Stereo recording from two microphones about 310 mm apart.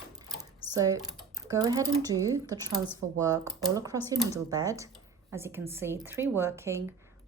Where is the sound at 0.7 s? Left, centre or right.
Centre.